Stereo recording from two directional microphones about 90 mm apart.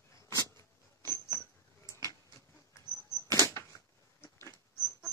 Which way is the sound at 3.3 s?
35° left (ahead or behind).